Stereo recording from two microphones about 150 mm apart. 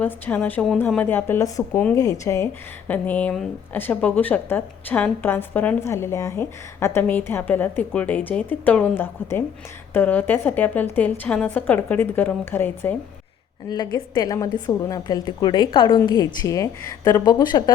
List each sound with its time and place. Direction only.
0.0 s speech: 10° left (ahead or behind)
13.7 s a woman's voice: 25° left (ahead or behind)